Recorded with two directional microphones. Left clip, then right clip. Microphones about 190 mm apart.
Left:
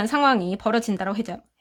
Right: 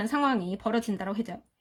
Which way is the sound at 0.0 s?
25° left (ahead or behind).